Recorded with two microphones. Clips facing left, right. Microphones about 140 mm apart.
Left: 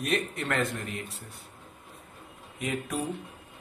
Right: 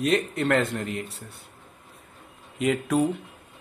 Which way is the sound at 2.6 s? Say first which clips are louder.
Right 8 dB; 90° right.